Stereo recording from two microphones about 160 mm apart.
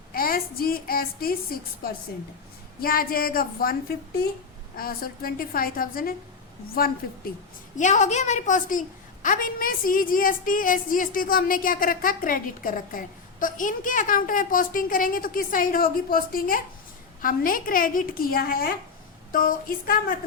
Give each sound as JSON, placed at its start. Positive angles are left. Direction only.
{"t": 0.1, "sound": "a woman's voice", "side_deg": 65}
{"t": 7.8, "sound": "a woman's voice", "side_deg": 50}
{"t": 9.2, "sound": "a woman's voice", "side_deg": 65}